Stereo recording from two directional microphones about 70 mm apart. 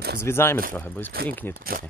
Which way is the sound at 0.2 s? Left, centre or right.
Left.